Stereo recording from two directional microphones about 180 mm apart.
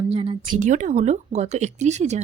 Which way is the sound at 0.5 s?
45° right (ahead or behind).